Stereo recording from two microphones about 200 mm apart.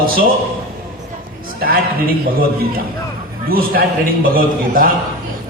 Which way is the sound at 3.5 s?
45° right (ahead or behind).